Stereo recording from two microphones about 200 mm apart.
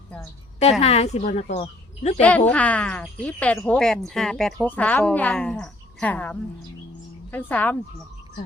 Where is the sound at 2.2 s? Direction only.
5° left (ahead or behind).